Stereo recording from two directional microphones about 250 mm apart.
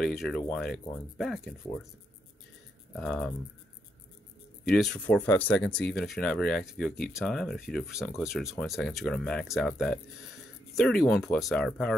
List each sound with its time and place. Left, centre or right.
0.0 s speech: centre
3.0 s speech: centre
4.6 s speech: centre